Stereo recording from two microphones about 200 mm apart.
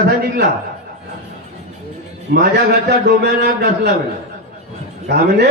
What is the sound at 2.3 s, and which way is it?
A man's voice, 50° right (ahead or behind).